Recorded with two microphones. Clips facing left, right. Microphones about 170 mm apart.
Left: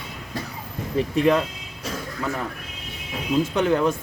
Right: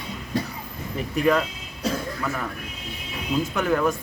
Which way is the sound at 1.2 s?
25° left (ahead or behind).